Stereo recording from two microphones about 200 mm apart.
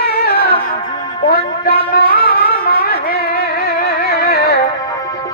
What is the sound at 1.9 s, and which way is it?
Music, 45° left (ahead or behind).